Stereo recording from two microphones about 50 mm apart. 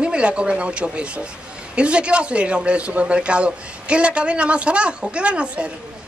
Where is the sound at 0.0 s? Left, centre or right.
Right.